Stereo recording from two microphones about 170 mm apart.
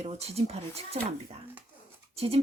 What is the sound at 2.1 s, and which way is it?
Speech, 35° right (ahead or behind).